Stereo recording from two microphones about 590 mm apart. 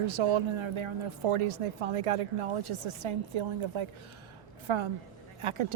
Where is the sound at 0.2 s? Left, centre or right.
Right.